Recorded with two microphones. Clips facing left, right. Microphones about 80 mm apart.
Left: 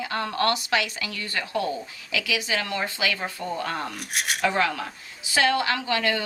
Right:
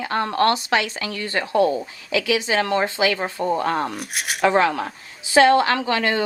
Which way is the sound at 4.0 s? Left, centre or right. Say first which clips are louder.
Right 1 dB; centre.